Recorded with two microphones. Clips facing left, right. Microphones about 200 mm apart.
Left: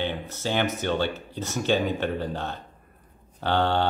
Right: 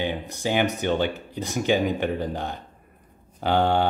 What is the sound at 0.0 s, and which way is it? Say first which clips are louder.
Speech: right 2 dB; 15° right (ahead or behind).